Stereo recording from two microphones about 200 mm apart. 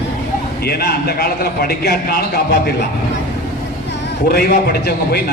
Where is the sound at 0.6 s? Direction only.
50° left (ahead or behind).